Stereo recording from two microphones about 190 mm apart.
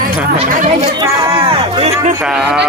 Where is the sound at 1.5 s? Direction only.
30° right (ahead or behind).